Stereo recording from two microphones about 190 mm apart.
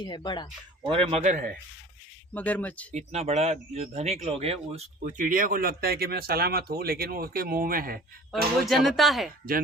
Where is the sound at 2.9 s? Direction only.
35° right (ahead or behind); by 8.0 s 50° right (ahead or behind).